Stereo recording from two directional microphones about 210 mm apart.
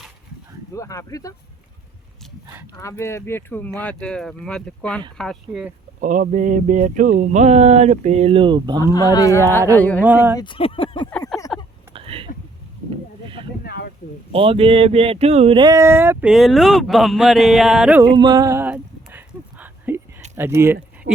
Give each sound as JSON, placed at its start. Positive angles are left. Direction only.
{"t": 0.7, "sound": "speech", "side_deg": 15}
{"t": 2.7, "sound": "speech", "side_deg": 15}
{"t": 6.0, "sound": "speech", "side_deg": -35}
{"t": 8.8, "sound": "speech", "side_deg": 15}
{"t": 10.0, "sound": "speech", "side_deg": -10}
{"t": 10.3, "sound": "speech", "side_deg": 25}
{"t": 11.3, "sound": "a sound", "side_deg": 0}
{"t": 11.9, "sound": "a sound", "side_deg": -25}
{"t": 13.7, "sound": "a sound", "side_deg": 50}
{"t": 14.3, "sound": "speech", "side_deg": -25}
{"t": 18.0, "sound": "a sound", "side_deg": -20}
{"t": 20.3, "sound": "speech", "side_deg": -10}